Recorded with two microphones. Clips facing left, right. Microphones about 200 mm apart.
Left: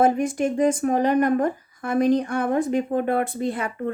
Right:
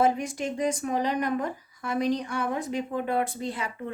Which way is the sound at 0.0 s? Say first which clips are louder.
Left 5 dB; 50° left (ahead or behind).